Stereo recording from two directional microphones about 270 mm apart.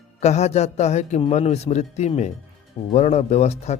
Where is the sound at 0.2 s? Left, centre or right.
Left.